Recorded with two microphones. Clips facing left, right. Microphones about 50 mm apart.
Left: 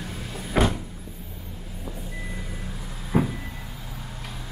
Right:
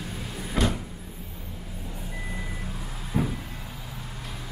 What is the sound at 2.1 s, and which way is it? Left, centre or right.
Vehicle, centre.